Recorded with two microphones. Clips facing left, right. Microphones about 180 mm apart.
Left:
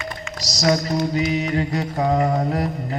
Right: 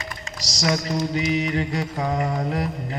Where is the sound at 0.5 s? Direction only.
35° left (ahead or behind).